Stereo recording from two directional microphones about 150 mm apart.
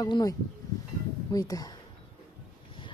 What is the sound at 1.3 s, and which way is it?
Speech, 25° left (ahead or behind).